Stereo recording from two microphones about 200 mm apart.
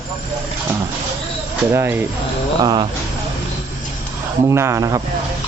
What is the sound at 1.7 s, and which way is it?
Rub, 10° right (ahead or behind).